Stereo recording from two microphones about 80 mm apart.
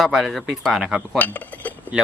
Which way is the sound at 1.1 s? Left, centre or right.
Left.